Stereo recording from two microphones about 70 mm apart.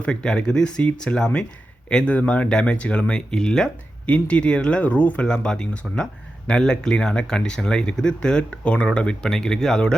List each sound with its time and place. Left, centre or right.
0.0 s speech: centre
5.2 s speech: centre